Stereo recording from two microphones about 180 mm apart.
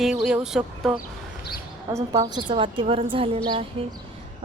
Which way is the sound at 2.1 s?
25° right (ahead or behind).